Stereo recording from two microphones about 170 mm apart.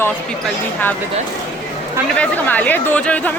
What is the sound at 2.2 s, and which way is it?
Speech, 10° left (ahead or behind).